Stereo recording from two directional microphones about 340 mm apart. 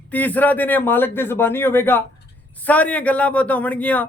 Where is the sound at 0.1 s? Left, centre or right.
Centre.